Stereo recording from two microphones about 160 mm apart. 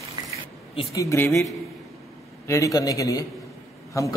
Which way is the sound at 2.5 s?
20° left (ahead or behind).